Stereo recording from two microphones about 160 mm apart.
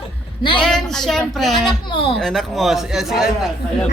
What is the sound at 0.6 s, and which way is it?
Speech, 5° left (ahead or behind).